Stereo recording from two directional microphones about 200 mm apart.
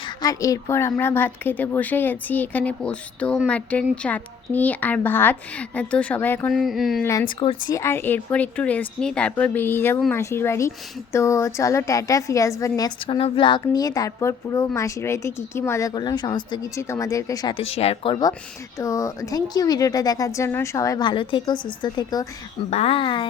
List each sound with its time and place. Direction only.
0.2 s a woman's voice: 15° left (ahead or behind)
6.5 s a sound: centre (ahead or behind)
7.0 s a woman's voice: 15° left (ahead or behind)
7.8 s a woman's voice: 10° left (ahead or behind)